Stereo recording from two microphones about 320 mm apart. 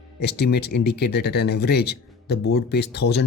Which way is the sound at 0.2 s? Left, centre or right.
Left.